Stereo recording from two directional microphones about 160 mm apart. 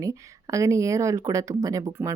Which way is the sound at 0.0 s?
20° right (ahead or behind).